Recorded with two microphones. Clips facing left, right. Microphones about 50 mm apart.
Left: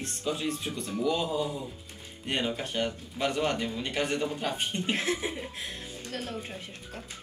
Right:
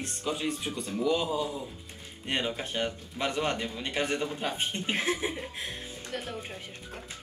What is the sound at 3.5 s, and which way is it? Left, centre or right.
Speech, centre.